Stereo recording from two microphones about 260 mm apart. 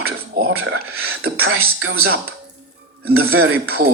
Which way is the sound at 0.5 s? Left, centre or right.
Right.